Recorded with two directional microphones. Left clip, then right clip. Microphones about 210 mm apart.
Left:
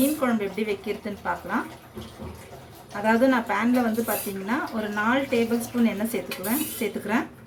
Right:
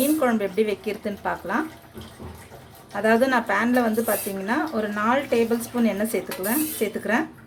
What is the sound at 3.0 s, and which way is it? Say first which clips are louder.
Speech: right 2 dB; 40° right (ahead or behind).